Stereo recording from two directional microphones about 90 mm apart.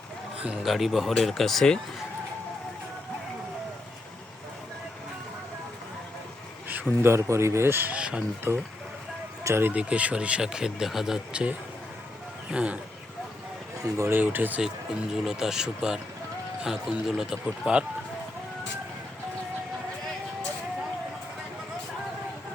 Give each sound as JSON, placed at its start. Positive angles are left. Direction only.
{"t": 0.4, "sound": "speech", "side_deg": -5}
{"t": 6.7, "sound": "speech", "side_deg": -20}
{"t": 8.5, "sound": "speech", "side_deg": -30}
{"t": 9.7, "sound": "speech", "side_deg": -15}
{"t": 13.8, "sound": "speech", "side_deg": -35}
{"t": 14.1, "sound": "speech", "side_deg": -20}
{"t": 15.1, "sound": "speech", "side_deg": -5}